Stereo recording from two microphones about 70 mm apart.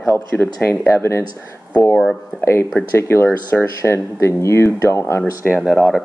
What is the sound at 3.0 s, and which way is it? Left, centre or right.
Speech, left.